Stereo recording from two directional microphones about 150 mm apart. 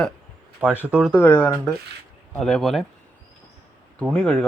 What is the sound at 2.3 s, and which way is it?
Speech, 5° left (ahead or behind).